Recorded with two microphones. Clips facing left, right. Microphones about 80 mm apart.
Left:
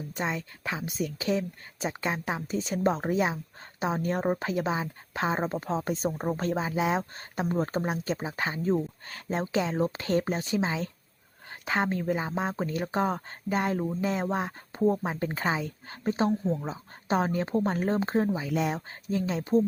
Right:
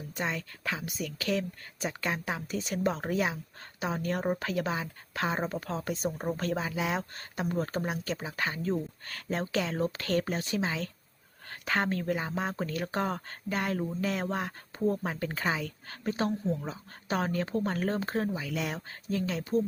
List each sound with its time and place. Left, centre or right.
0.2 s speech: centre